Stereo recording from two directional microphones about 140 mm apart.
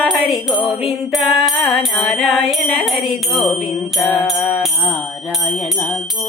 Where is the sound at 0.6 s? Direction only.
Centre (ahead or behind).